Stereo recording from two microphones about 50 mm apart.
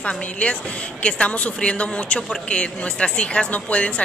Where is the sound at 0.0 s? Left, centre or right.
Left.